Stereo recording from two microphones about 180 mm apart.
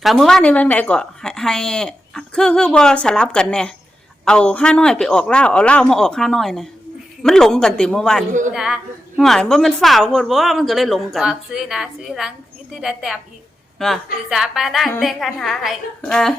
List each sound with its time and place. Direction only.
0.0 s a woman's voice: centre (ahead or behind)
8.3 s speech: 45° right (ahead or behind)
8.5 s a woman's voice: 5° right (ahead or behind)